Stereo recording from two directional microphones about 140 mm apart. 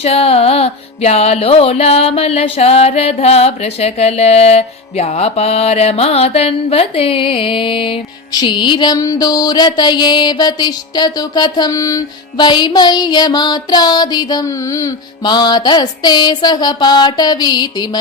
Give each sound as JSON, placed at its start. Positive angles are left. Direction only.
{"t": 0.0, "sound": "music", "side_deg": 45}